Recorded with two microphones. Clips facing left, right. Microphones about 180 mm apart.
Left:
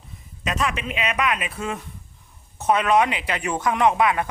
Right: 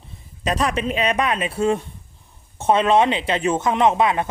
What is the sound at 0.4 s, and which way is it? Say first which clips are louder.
Speech: right 5 dB; 35° right (ahead or behind).